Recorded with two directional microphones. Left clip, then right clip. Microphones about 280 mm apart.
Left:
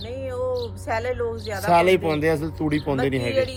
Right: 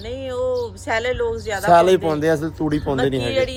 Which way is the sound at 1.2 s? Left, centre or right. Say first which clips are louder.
Right 5 dB; right.